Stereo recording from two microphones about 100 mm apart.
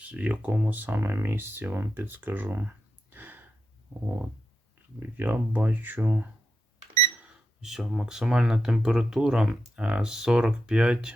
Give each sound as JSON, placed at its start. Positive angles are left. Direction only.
{"t": 0.0, "sound": "speech", "side_deg": -15}
{"t": 4.9, "sound": "speech", "side_deg": -20}
{"t": 7.6, "sound": "speech", "side_deg": -5}